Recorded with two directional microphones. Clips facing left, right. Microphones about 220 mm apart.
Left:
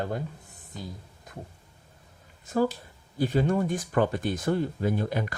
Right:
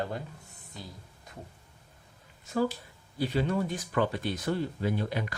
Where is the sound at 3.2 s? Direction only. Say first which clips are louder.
Left 4 dB; 45° left (ahead or behind).